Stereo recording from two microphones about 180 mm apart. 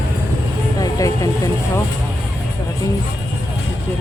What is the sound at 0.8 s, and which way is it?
Vehicle, 20° left (ahead or behind).